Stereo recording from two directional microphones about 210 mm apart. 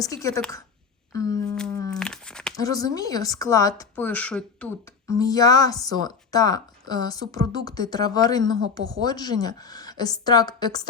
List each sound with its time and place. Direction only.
0.0 s speech: 15° left (ahead or behind)
1.1 s a sound: 15° left (ahead or behind)
1.5 s humming: 5° left (ahead or behind)
1.9 s a sound: 5° left (ahead or behind)
2.6 s speech: 15° left (ahead or behind)
5.1 s a woman's voice: 15° left (ahead or behind)